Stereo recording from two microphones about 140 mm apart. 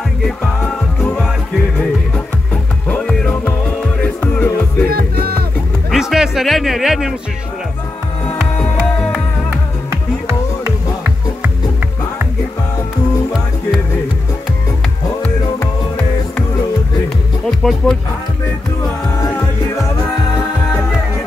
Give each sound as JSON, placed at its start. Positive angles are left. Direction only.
{"t": 0.2, "sound": "music", "side_deg": 10}
{"t": 4.8, "sound": "music", "side_deg": -90}
{"t": 5.9, "sound": "music", "side_deg": 0}
{"t": 17.5, "sound": "speech", "side_deg": 0}
{"t": 19.2, "sound": "music", "side_deg": 20}